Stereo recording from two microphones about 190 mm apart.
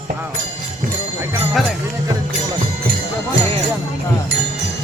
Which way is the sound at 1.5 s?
Centre (ahead or behind).